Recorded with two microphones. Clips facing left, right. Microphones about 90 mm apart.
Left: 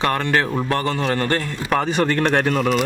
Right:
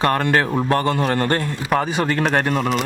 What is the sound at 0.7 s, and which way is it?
Speech, 30° right (ahead or behind).